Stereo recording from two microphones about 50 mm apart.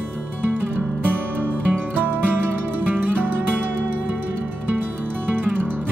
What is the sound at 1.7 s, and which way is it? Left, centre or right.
Music, right.